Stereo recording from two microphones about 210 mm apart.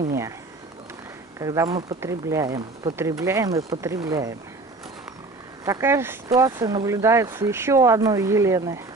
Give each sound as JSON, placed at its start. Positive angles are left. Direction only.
{"t": 1.4, "sound": "speech", "side_deg": -15}
{"t": 5.7, "sound": "speech", "side_deg": -10}